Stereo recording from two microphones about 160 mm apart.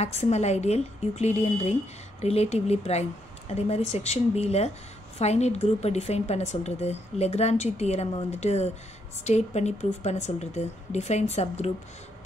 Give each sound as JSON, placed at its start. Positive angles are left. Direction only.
{"t": 0.0, "sound": "speech", "side_deg": 45}